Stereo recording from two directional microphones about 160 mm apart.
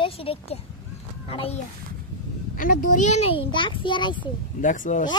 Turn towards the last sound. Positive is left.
turn(degrees=55)  # may be behind; listen again after turning